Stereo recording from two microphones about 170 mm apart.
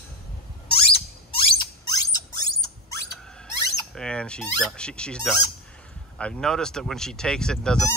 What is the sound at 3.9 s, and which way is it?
Fowl, 5° left (ahead or behind).